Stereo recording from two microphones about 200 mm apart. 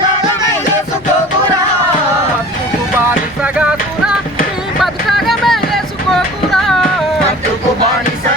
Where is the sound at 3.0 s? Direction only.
5° right (ahead or behind).